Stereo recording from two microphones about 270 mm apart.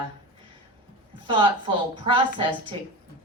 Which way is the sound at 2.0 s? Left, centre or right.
Centre.